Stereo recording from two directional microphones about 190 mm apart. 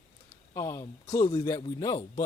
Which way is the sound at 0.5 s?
15° left (ahead or behind).